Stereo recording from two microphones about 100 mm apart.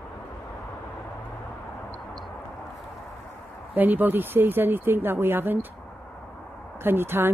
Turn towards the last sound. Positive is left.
turn(degrees=-20)  # may be behind; listen again after turning